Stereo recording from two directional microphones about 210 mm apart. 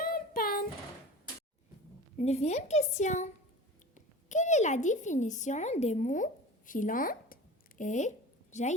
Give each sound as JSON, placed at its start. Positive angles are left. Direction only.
{"t": 0.0, "sound": "child singing", "side_deg": 45}
{"t": 2.1, "sound": "a woman's voice", "side_deg": 30}